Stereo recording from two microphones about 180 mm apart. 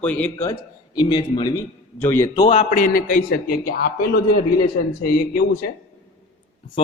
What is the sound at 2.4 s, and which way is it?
Speech, 30° left (ahead or behind).